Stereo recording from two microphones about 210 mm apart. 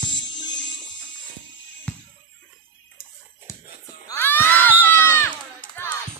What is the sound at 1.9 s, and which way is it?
Music, 5° left (ahead or behind).